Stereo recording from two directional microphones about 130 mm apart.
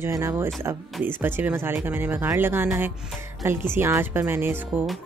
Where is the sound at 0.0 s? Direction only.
25° right (ahead or behind).